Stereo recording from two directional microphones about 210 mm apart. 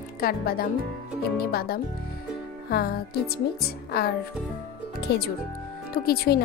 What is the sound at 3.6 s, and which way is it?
Speech, 45° left (ahead or behind).